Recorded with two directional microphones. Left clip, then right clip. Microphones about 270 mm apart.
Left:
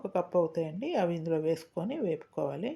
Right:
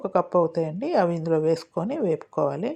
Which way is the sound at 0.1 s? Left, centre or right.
Right.